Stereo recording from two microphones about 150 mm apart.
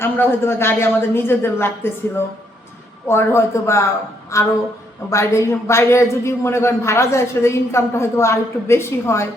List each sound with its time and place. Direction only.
0.0 s speech: 15° left (ahead or behind)
3.1 s speech: 15° left (ahead or behind)